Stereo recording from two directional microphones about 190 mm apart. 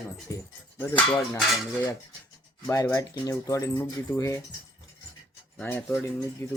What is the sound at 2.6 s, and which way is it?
Speech, 15° left (ahead or behind).